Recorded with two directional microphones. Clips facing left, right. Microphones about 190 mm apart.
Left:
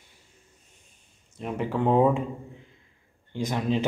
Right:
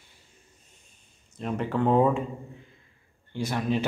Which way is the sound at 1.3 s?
10° left (ahead or behind).